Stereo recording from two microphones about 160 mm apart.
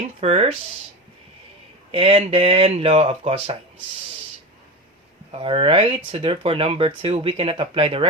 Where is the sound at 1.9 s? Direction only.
35° right (ahead or behind).